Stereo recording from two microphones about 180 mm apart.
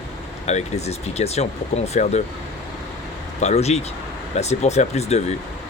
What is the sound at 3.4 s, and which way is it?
Speech, 40° left (ahead or behind).